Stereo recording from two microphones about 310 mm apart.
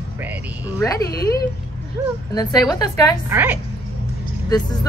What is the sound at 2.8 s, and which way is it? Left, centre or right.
Speech, centre.